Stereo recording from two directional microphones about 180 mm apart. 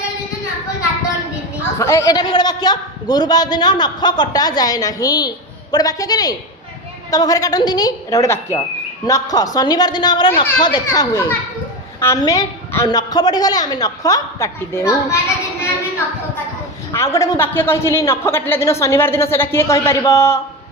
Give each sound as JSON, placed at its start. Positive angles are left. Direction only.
{"t": 1.8, "sound": "a man's voice", "side_deg": 15}
{"t": 16.9, "sound": "a man's voice", "side_deg": 15}